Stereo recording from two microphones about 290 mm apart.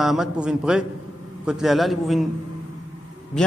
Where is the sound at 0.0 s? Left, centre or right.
Centre.